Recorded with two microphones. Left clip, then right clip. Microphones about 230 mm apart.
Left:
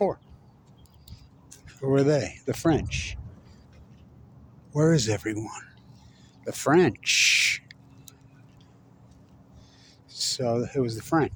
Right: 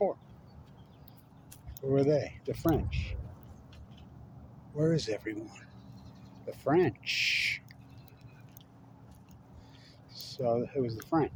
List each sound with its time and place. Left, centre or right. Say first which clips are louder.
1.9 s speech: left 5 dB; left
4.7 s speech: left 7 dB; left
6.4 s owl: left 7 dB; left
10.1 s speech: left 5 dB; left